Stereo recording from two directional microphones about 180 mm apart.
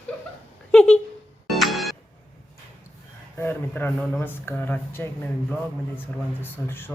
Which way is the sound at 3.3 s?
10° left (ahead or behind).